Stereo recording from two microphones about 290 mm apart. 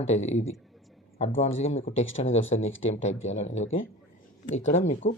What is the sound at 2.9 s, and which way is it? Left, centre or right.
Speech, left.